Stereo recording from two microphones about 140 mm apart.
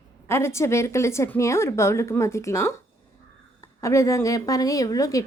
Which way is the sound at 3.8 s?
20° left (ahead or behind).